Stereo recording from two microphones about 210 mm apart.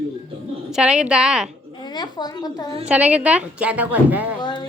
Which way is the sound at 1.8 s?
20° left (ahead or behind).